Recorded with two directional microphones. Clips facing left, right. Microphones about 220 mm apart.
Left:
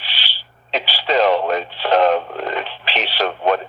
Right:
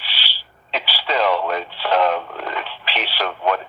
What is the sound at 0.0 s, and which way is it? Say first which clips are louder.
Radio: left 1 dB; 20° left (ahead or behind).